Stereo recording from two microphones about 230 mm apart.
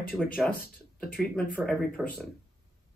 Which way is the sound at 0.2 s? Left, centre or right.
Centre.